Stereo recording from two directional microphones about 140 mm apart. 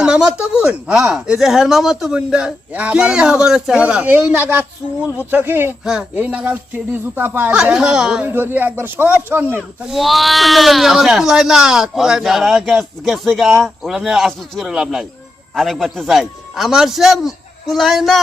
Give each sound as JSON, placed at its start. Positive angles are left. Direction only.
{"t": 0.0, "sound": "speech", "side_deg": -5}
{"t": 9.9, "sound": "speech", "side_deg": 0}